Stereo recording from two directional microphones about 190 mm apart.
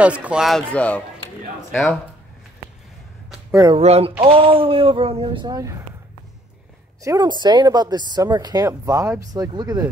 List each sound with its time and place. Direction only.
0.0 s speech: 5° right (ahead or behind)
3.7 s speech: 30° right (ahead or behind)
7.0 s speech: 20° right (ahead or behind)